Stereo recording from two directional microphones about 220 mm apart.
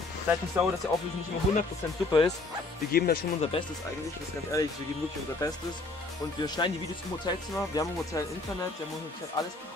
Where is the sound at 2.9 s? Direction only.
45° left (ahead or behind).